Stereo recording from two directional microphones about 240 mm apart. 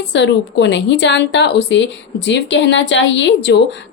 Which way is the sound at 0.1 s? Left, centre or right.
Left.